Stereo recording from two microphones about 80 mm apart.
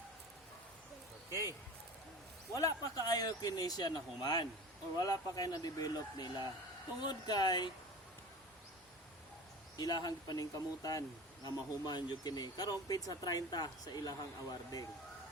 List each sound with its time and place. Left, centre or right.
1.3 s speech: left
4.9 s speech: left
9.7 s speech: left
11.4 s speech: left